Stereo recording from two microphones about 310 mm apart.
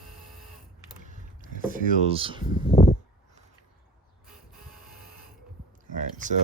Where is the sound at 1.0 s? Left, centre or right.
Right.